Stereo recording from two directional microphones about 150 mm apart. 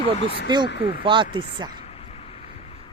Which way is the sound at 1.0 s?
35° right (ahead or behind).